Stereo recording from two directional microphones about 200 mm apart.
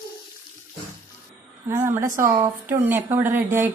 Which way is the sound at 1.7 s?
15° right (ahead or behind).